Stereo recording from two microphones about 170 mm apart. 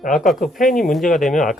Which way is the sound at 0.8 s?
Centre (ahead or behind).